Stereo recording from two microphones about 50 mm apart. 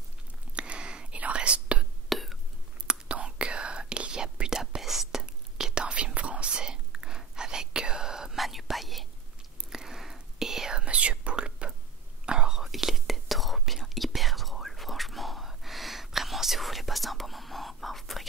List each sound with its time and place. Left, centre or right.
0.6 s whispering: right
2.0 s whispering: centre
2.9 s whispering: right
10.8 s whispering: right
12.6 s whispering: centre